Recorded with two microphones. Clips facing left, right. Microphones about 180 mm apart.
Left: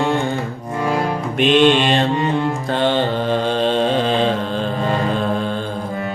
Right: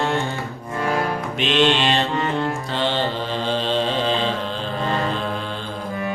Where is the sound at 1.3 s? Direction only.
50° left (ahead or behind).